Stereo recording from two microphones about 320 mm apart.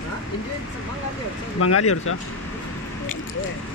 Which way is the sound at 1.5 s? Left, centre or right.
Left.